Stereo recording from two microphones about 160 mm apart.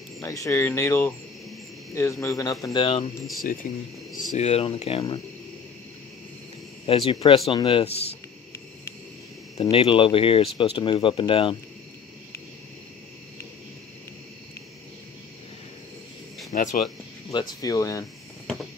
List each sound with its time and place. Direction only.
0.2 s speech: 20° left (ahead or behind)
2.6 s speech: 30° left (ahead or behind)
3.6 s speech: 55° left (ahead or behind); by 5.2 s 35° left (ahead or behind)
6.9 s speech: 35° left (ahead or behind)
9.6 s speech: 35° left (ahead or behind)
16.5 s speech: 55° left (ahead or behind)
17.3 s speech: 25° left (ahead or behind)